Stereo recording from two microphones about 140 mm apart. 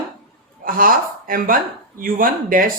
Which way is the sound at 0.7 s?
85° right.